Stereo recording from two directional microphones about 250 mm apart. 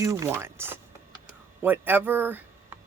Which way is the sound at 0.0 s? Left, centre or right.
Centre.